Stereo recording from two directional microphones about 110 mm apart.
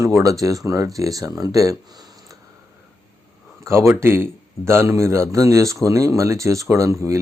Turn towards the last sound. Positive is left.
turn(degrees=-30)  # may be behind; listen again after turning